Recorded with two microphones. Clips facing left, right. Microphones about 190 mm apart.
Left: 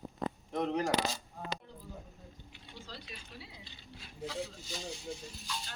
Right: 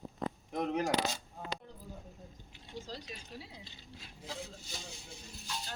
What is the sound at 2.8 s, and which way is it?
Speech, 40° right (ahead or behind).